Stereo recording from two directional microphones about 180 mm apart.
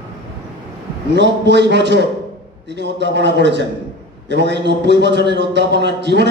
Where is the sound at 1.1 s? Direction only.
70° right (ahead or behind).